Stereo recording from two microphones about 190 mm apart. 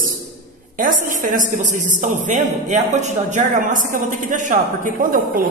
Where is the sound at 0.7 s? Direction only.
45° right (ahead or behind).